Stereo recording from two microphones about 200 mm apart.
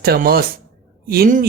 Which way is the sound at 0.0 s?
50° right (ahead or behind).